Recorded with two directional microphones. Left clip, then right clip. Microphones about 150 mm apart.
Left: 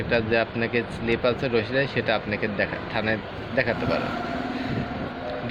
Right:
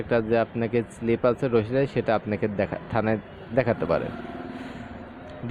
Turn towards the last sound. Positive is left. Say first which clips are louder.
# even
turn(degrees=-40)  # may be behind; listen again after turning